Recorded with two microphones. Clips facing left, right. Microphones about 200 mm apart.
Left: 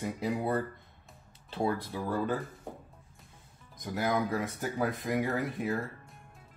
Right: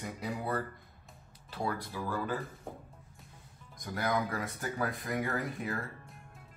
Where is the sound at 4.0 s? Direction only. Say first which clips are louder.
Left 3 dB; 25° left (ahead or behind).